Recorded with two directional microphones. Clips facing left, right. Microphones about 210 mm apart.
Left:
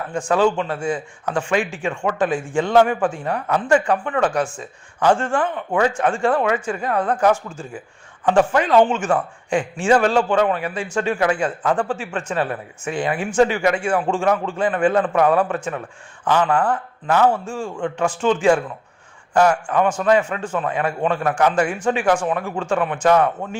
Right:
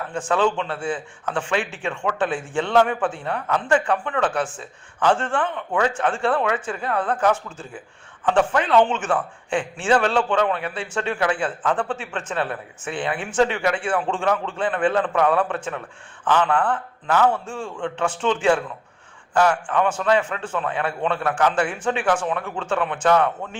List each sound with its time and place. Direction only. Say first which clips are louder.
0.1 s a man's voice: left 3 dB; 10° left (ahead or behind)